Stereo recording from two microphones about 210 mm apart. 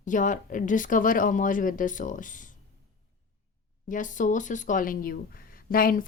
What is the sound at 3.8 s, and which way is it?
A woman's voice, 40° left (ahead or behind).